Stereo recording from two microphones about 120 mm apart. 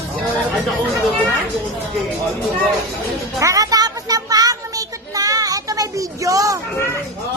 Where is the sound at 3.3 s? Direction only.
30° right (ahead or behind).